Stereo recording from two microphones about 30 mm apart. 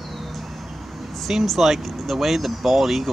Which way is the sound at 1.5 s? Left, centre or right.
Centre.